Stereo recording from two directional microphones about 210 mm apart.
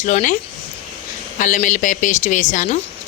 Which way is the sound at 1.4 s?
35° left (ahead or behind).